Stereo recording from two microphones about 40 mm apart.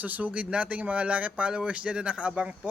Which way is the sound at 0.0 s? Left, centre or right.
Right.